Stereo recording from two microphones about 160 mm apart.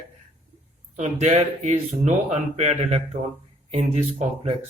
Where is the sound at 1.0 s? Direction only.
45° right (ahead or behind).